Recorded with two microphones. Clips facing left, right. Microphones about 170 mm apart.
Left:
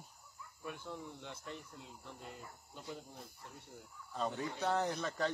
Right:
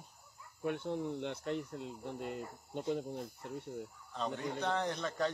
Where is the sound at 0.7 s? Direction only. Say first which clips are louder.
Right 10 dB; 70° right (ahead or behind).